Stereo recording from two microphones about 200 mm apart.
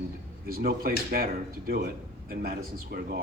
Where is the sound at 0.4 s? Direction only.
50° right (ahead or behind).